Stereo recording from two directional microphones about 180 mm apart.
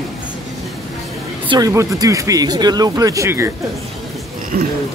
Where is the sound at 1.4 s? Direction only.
20° right (ahead or behind).